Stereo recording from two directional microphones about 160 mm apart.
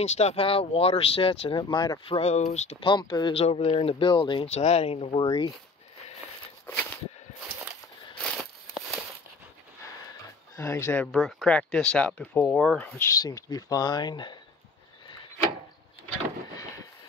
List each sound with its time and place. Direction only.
0.0 s speech: 40° left (ahead or behind); by 3.3 s 25° left (ahead or behind)
3.3 s speech: 40° left (ahead or behind)
4.5 s speech: 40° left (ahead or behind)
6.6 s a sound: 10° left (ahead or behind)
10.5 s speech: 15° left (ahead or behind)
13.1 s speech: 25° left (ahead or behind)